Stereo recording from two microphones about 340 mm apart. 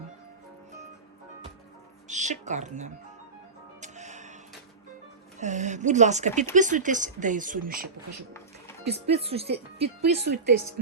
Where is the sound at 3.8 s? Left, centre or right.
Right.